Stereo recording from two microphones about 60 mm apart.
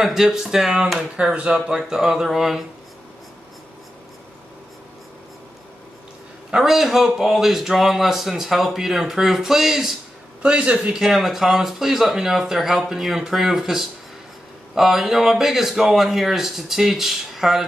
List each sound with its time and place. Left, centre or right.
0.0 s speech: centre
6.5 s speech: centre
10.4 s speech: centre
11.0 s speech: centre